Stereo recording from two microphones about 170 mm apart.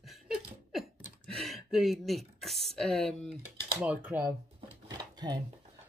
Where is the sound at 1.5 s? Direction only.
Centre (ahead or behind).